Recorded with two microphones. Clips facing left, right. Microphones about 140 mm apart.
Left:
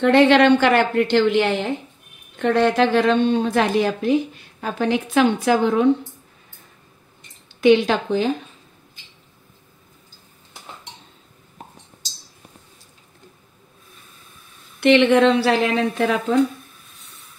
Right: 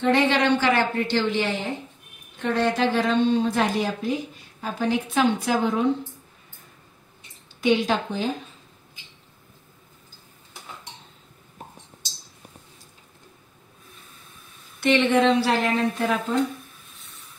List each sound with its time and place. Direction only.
0.0 s a woman's voice: 70° left (ahead or behind)
7.6 s a woman's voice: 75° left (ahead or behind)
14.8 s a woman's voice: 65° left (ahead or behind)